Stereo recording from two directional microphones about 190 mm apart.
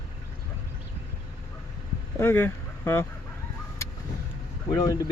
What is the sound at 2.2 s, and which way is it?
Speech, 10° left (ahead or behind).